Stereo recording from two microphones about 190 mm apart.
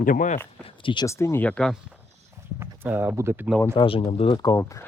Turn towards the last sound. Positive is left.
turn(degrees=15)  # may be behind; listen again after turning